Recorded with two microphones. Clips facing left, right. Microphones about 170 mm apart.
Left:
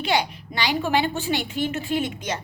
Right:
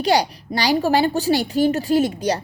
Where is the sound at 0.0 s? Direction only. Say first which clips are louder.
Right 5 dB; 40° right (ahead or behind).